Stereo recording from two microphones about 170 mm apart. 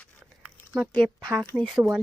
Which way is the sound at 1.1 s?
10° right (ahead or behind).